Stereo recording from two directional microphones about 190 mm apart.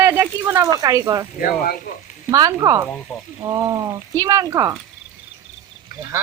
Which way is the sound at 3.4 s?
15° right (ahead or behind).